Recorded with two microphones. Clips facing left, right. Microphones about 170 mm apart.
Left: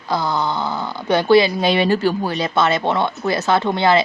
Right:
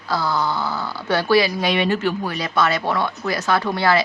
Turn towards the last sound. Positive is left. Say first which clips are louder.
# left 3 dB
turn(degrees=20)  # may be behind; listen again after turning